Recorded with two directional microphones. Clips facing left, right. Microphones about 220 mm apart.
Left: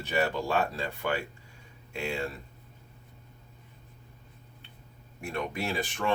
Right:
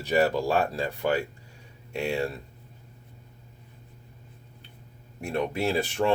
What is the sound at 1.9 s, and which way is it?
Speech, 40° right (ahead or behind).